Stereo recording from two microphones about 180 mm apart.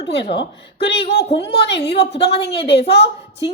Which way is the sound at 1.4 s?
70° left (ahead or behind).